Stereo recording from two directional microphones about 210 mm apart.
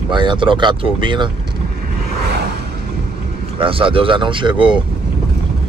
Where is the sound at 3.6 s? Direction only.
25° right (ahead or behind).